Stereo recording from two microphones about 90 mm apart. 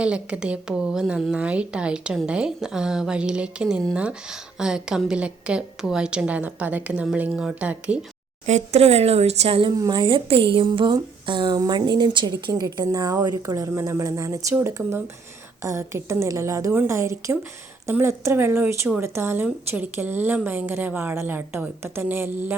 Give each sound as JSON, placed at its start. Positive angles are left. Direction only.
{"t": 0.0, "sound": "a woman's voice", "side_deg": -10}
{"t": 9.5, "sound": "a woman's voice", "side_deg": -70}
{"t": 9.7, "sound": "a woman's voice", "side_deg": -45}